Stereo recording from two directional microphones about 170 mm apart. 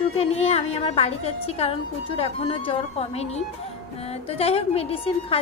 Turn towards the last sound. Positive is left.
turn(degrees=35)  # may be behind; listen again after turning